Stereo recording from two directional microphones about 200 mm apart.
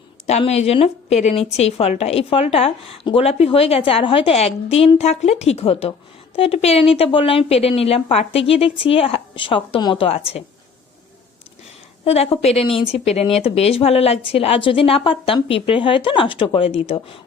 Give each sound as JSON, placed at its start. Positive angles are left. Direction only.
{"t": 0.3, "sound": "a woman's voice", "side_deg": 30}
{"t": 12.0, "sound": "a woman's voice", "side_deg": 30}